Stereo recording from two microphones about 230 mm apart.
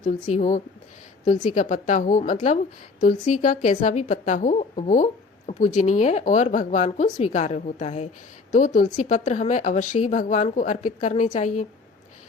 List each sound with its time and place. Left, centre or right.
0.3 s a woman's voice: left